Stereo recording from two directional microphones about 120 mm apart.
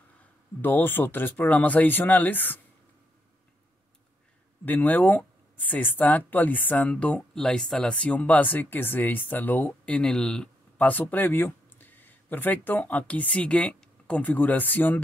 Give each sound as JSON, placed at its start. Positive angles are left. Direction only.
{"t": 0.6, "sound": "speech", "side_deg": 15}
{"t": 4.6, "sound": "speech", "side_deg": 15}